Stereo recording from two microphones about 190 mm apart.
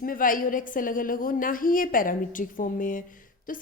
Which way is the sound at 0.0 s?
45° left (ahead or behind).